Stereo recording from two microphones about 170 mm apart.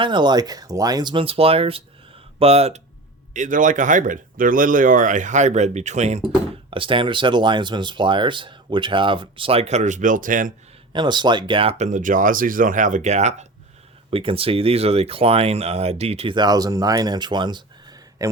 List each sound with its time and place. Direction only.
0.0 s speech: 25° right (ahead or behind)
3.3 s speech: 50° right (ahead or behind)
6.7 s speech: 30° right (ahead or behind); by 10.5 s 50° right (ahead or behind)
10.9 s speech: 25° right (ahead or behind)